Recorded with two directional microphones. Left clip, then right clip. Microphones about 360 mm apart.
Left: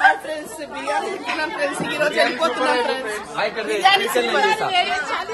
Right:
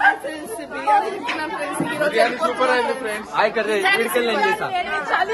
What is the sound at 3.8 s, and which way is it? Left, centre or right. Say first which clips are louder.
Speech: left 5 dB; left.